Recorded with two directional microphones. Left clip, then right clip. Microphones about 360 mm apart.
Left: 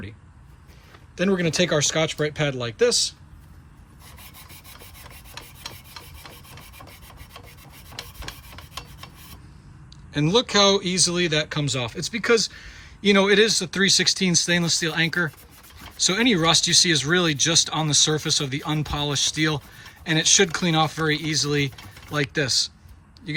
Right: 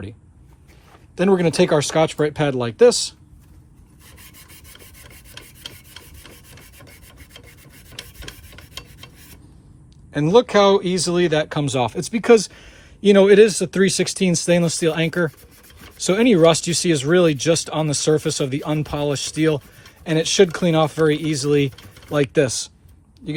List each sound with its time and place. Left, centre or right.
1.1 s speech: centre
10.1 s speech: centre